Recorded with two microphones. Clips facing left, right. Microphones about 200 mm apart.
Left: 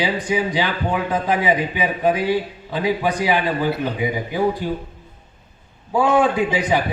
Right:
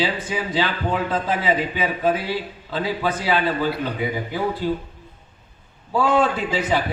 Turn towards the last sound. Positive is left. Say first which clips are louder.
# left 3 dB
turn(degrees=15)  # may be behind; listen again after turning